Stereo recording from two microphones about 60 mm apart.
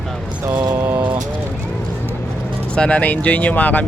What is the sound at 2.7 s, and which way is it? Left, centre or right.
Speech, centre.